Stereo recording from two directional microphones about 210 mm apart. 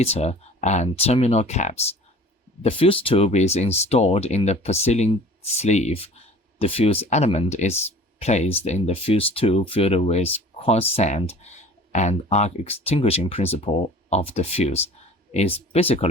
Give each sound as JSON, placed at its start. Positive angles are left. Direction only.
{"t": 0.0, "sound": "speech", "side_deg": 30}